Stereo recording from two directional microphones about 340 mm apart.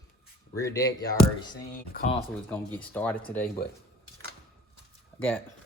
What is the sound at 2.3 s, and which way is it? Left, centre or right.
Speech, centre.